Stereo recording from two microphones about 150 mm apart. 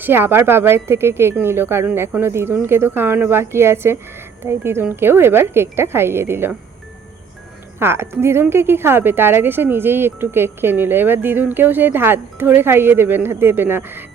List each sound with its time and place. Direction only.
0.0 s a woman's voice: 15° right (ahead or behind)
7.8 s a woman's voice: 15° right (ahead or behind)